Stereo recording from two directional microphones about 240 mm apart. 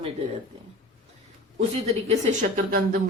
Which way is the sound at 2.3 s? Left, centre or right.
Right.